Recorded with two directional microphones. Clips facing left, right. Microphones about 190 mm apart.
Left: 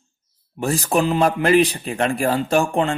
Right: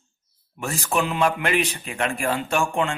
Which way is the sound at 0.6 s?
35° left (ahead or behind).